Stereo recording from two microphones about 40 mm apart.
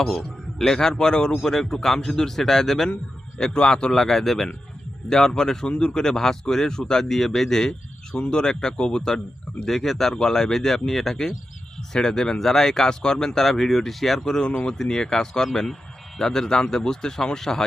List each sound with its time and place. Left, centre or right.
0.0 s a man's voice: centre
3.3 s speech: centre
3.9 s speech: centre
6.0 s speech: centre
14.4 s speech: left